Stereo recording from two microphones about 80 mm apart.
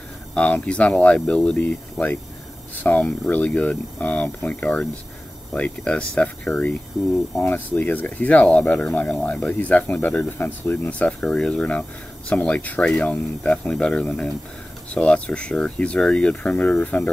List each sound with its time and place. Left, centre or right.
0.3 s speech: centre
10.9 s speech: centre